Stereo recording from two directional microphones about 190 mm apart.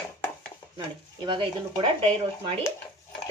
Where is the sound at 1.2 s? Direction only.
25° right (ahead or behind).